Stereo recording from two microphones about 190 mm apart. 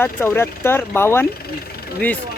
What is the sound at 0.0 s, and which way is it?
Speech, 10° left (ahead or behind).